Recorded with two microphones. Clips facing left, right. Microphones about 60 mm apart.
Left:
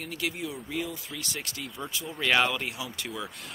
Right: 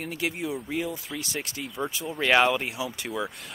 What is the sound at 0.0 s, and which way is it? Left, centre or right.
Speech, right.